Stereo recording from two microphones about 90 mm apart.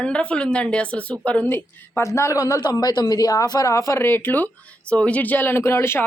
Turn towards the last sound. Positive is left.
turn(degrees=30)  # may be behind; listen again after turning